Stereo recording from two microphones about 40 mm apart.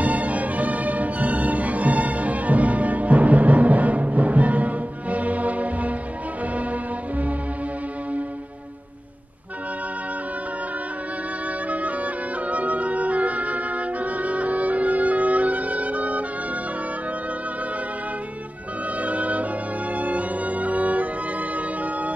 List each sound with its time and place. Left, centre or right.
0.0 s music: right
11.7 s music: right
18.9 s music: right